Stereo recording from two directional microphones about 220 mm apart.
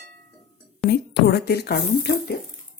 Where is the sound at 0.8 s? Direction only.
50° left (ahead or behind).